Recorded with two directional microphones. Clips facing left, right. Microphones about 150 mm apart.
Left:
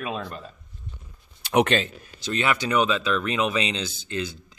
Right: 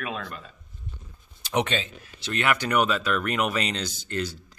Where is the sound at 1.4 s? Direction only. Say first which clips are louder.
Left 5 dB; 60° left (ahead or behind).